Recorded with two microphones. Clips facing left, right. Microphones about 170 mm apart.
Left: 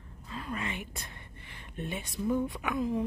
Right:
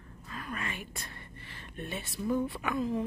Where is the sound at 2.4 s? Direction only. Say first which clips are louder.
Even; 15° left (ahead or behind).